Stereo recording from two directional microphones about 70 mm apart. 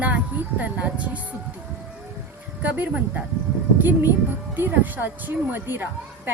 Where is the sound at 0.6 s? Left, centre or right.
Right.